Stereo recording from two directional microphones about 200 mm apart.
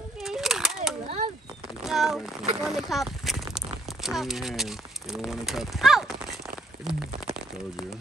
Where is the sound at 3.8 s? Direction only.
Centre (ahead or behind).